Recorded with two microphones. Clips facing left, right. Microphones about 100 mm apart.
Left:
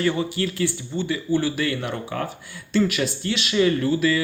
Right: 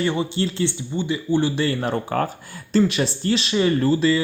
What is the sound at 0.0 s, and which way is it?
Speech, 20° right (ahead or behind).